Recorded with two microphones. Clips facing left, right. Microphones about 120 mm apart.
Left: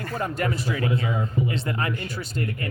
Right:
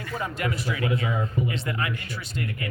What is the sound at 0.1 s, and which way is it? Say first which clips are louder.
Speech: left 2 dB; 40° left (ahead or behind).